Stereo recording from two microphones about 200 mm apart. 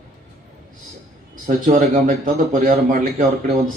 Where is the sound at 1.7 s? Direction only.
40° right (ahead or behind).